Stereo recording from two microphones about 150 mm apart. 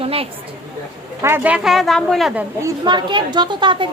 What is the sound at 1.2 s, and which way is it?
A woman's voice, 15° right (ahead or behind).